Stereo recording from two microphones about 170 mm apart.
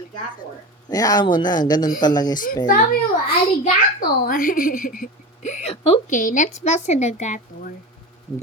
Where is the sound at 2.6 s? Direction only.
60° left (ahead or behind).